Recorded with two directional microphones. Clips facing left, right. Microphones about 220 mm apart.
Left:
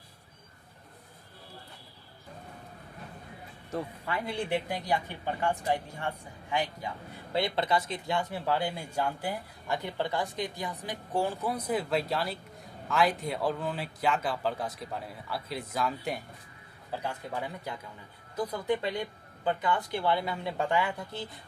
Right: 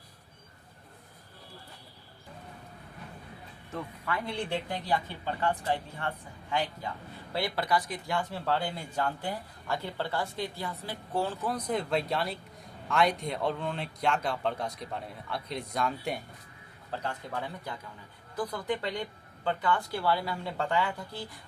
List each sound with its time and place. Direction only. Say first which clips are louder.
3.7 s speech: left 2 dB; 30° left (ahead or behind)
4.3 s a man's voice: left 4 dB; 10° left (ahead or behind)
21.1 s speech: left 2 dB; 20° left (ahead or behind)